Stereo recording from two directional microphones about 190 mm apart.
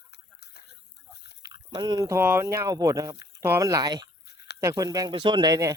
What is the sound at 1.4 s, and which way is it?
Speech, 20° right (ahead or behind).